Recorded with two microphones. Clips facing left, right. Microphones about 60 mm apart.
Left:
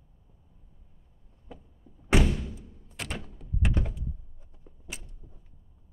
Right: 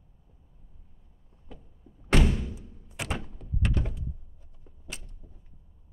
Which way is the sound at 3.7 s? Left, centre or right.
Centre.